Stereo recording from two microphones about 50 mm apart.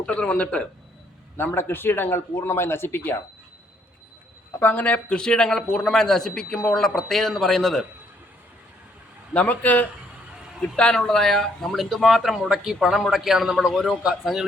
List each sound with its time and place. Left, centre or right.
0.0 s a man's voice: left
1.4 s speech: left
4.6 s speech: left
5.0 s speech: centre
9.3 s a man's voice: left
10.8 s speech: centre
11.7 s a man's voice: centre